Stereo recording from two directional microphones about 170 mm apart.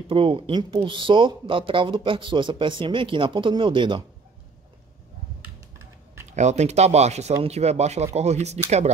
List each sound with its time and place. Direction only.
0.1 s speech: 30° right (ahead or behind)
6.3 s speech: 40° right (ahead or behind)